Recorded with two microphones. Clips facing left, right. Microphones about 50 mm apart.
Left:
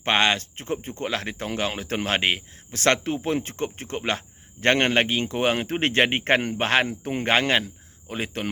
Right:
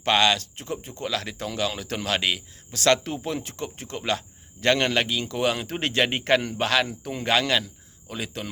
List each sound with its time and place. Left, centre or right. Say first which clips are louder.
0.0 s speech: even; left